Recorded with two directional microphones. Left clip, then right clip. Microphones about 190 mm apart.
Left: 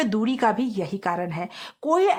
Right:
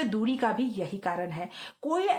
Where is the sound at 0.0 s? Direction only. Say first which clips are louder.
Left 6 dB; 35° left (ahead or behind).